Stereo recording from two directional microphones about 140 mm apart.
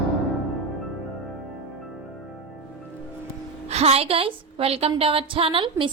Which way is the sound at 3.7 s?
50° right (ahead or behind).